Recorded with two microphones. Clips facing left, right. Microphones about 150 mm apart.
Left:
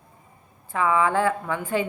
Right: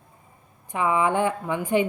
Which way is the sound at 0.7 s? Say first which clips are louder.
Left 1 dB; 20° right (ahead or behind).